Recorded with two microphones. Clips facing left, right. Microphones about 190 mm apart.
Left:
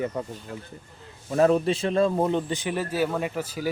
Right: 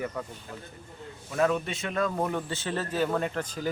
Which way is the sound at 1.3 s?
35° left (ahead or behind).